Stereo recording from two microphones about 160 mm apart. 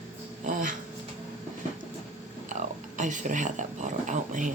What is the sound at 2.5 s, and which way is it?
Speech, 50° right (ahead or behind).